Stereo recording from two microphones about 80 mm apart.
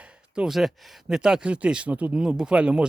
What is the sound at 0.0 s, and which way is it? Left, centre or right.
Speech, centre.